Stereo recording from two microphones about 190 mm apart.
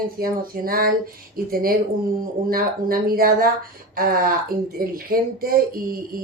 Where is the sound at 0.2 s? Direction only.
50° right (ahead or behind).